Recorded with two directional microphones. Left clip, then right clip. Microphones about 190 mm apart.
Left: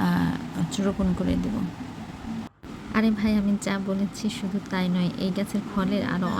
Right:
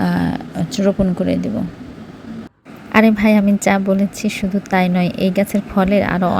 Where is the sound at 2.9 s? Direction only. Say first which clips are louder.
Right 12 dB; 45° right (ahead or behind).